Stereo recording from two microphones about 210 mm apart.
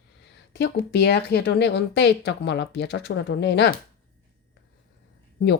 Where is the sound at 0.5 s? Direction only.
55° left (ahead or behind).